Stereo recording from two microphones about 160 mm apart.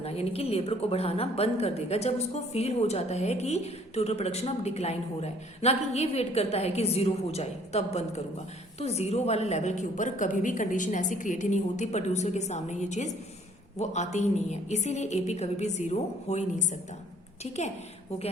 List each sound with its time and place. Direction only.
0.0 s a woman's voice: 40° left (ahead or behind)